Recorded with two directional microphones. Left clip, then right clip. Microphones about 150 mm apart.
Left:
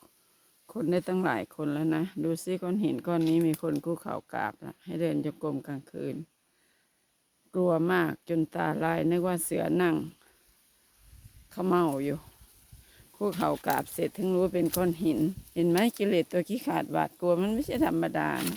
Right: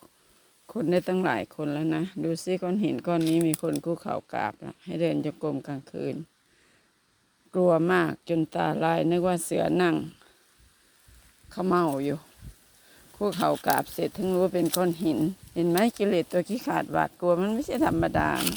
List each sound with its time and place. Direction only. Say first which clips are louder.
0.7 s speech: right 3 dB; centre (ahead or behind)
7.5 s speech: right 4 dB; 5° left (ahead or behind)
11.4 s speech: right 2 dB; 10° left (ahead or behind)
13.4 s speech: right 5 dB; 10° left (ahead or behind)